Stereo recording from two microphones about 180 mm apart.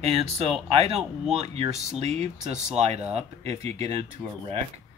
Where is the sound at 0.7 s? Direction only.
35° right (ahead or behind).